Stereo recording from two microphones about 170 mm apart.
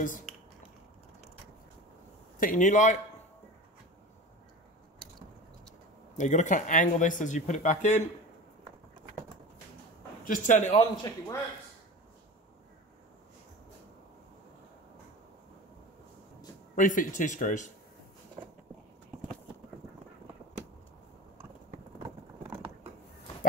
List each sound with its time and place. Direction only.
0.0 s speech: 50° left (ahead or behind)
2.4 s speech: 50° left (ahead or behind)
6.1 s speech: 45° left (ahead or behind)
10.2 s speech: 50° left (ahead or behind)
16.7 s speech: 50° left (ahead or behind)